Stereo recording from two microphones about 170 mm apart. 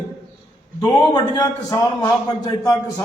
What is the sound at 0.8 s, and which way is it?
A man's voice, 25° left (ahead or behind).